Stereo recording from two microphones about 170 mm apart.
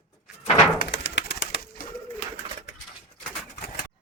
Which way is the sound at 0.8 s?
90° left.